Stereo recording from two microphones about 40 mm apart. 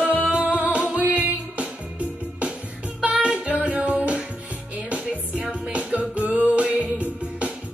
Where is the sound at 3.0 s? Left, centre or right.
Right.